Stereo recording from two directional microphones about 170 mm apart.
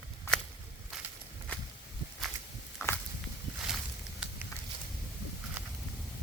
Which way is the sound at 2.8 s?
15° left (ahead or behind).